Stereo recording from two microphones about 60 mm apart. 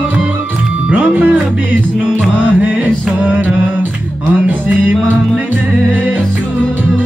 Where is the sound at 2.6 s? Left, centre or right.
Right.